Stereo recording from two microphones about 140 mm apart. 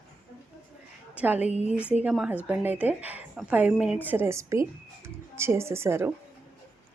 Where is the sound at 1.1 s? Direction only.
10° right (ahead or behind).